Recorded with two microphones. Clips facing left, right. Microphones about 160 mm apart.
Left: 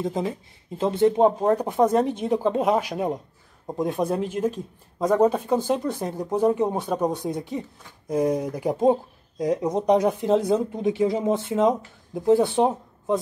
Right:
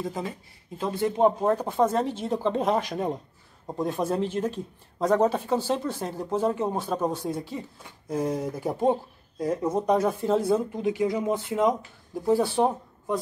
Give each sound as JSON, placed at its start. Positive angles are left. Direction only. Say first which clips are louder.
{"t": 0.0, "sound": "speech", "louder": "left 5 dB", "side_deg": 20}